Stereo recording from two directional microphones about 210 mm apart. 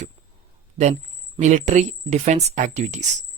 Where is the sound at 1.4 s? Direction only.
35° right (ahead or behind).